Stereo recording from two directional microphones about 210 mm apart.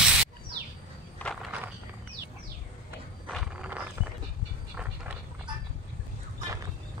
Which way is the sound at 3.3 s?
Centre (ahead or behind).